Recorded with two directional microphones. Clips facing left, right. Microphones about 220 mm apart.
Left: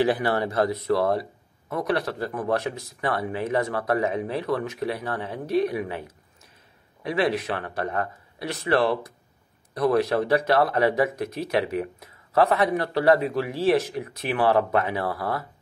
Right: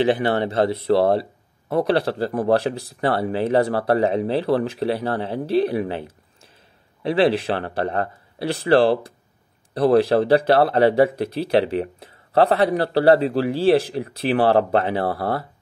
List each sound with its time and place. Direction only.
0.0 s speech: 25° right (ahead or behind)